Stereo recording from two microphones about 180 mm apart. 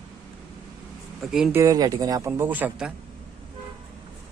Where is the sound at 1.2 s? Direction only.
Centre (ahead or behind).